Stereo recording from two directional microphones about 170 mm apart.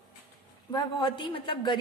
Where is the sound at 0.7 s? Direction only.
30° left (ahead or behind).